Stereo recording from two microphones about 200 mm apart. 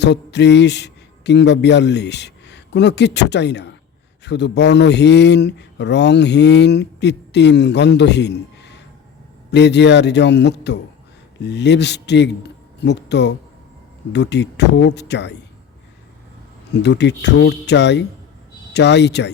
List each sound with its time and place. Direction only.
0.0 s a man's voice: 60° left (ahead or behind)
16.8 s speech: 60° left (ahead or behind)